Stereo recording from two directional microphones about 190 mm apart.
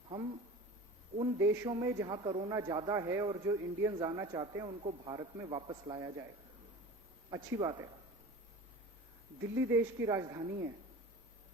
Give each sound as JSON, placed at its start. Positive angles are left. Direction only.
{"t": 0.1, "sound": "a sound", "side_deg": -25}
{"t": 1.2, "sound": "a man's voice", "side_deg": -20}
{"t": 7.3, "sound": "a man's voice", "side_deg": -20}
{"t": 9.4, "sound": "speech", "side_deg": -15}